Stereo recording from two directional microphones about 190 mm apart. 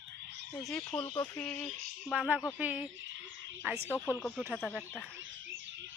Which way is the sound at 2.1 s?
Centre (ahead or behind).